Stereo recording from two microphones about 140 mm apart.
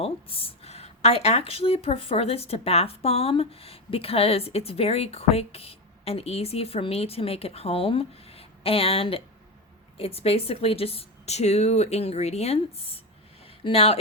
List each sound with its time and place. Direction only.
0.0 s speech: 40° left (ahead or behind)